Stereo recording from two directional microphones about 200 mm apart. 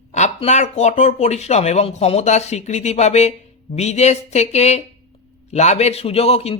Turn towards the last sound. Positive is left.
turn(degrees=30)  # may be behind; listen again after turning